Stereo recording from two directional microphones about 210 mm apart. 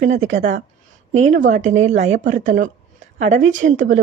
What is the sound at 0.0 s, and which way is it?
A woman's voice, 35° right (ahead or behind).